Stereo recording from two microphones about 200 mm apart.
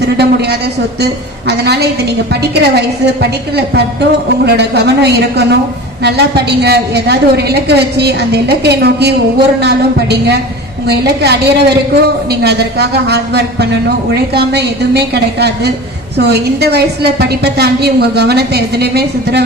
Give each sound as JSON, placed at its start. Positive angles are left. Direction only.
{"t": 0.0, "sound": "a woman's voice", "side_deg": -55}